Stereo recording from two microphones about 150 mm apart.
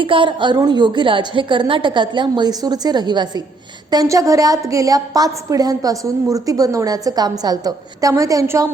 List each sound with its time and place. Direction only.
0.0 s a woman's voice: 35° right (ahead or behind)